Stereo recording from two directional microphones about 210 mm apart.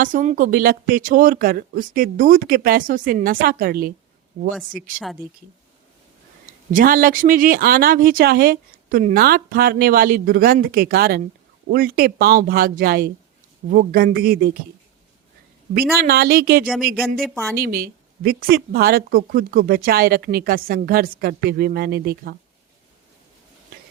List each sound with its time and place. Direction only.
0.0 s speech: 40° right (ahead or behind)
6.7 s speech: 40° right (ahead or behind)
16.0 s speech: 45° right (ahead or behind)